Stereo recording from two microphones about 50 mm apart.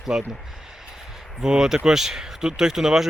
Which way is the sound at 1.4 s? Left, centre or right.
Centre.